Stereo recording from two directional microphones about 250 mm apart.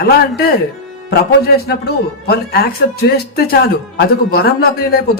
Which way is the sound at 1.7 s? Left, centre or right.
Left.